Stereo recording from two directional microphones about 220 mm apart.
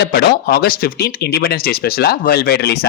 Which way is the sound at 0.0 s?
45° left (ahead or behind).